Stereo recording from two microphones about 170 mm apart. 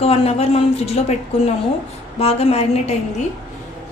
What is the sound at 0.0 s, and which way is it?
Speech, 35° left (ahead or behind).